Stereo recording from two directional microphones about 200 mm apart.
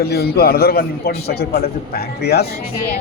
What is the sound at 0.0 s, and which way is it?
A man's voice, 50° left (ahead or behind).